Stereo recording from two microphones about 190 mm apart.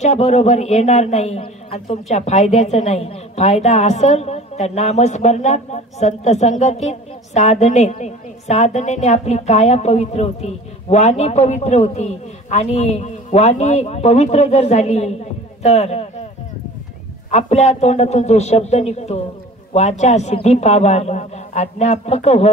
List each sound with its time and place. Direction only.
0.0 s a man's voice: 35° left (ahead or behind)
17.3 s a man's voice: 35° left (ahead or behind)